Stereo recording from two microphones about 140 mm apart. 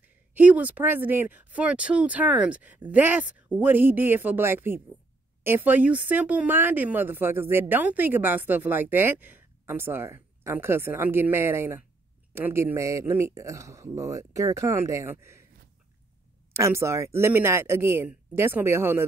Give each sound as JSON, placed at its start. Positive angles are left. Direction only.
{"t": 0.0, "sound": "speech", "side_deg": -10}
{"t": 16.5, "sound": "speech", "side_deg": -20}